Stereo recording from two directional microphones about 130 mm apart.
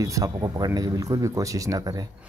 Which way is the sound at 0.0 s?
25° right (ahead or behind).